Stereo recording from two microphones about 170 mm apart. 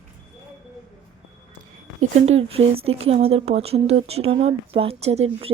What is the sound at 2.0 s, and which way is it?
Speech, 40° right (ahead or behind).